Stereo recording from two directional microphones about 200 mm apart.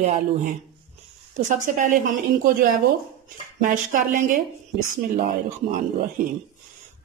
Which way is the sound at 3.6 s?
40° right (ahead or behind).